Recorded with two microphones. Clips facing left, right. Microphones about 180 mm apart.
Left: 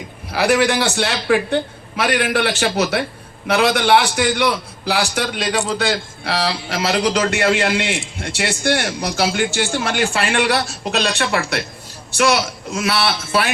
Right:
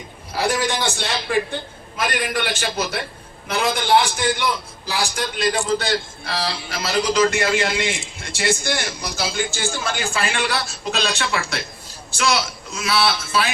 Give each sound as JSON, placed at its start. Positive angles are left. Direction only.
{"t": 0.3, "sound": "a man's voice", "side_deg": 75}